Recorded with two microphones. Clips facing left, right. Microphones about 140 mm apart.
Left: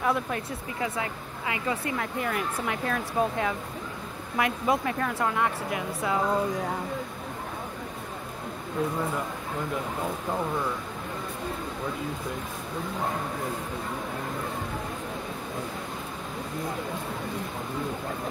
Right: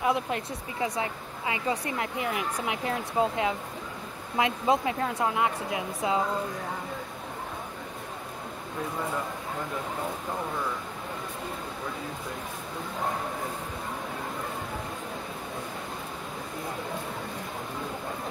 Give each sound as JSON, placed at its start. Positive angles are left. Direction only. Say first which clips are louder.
{"t": 0.0, "sound": "speech", "louder": "even", "side_deg": -20}